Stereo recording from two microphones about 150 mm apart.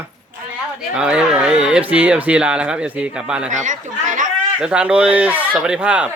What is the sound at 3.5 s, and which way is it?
Speech, 55° right (ahead or behind).